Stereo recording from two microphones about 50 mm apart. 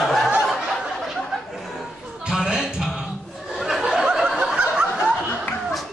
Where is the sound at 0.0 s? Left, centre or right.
Centre.